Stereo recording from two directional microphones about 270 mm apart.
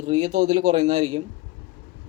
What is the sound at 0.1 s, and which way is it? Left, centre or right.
Speech, right.